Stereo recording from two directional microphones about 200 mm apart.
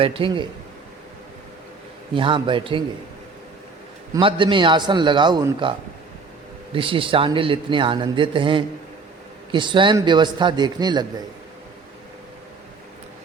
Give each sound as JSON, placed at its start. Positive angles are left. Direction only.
{"t": 0.0, "sound": "a man's voice", "side_deg": -25}
{"t": 2.1, "sound": "a man's voice", "side_deg": -25}
{"t": 4.1, "sound": "a man's voice", "side_deg": -25}
{"t": 6.7, "sound": "a man's voice", "side_deg": -25}